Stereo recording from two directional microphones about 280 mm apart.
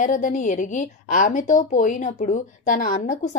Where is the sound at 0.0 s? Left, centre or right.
Left.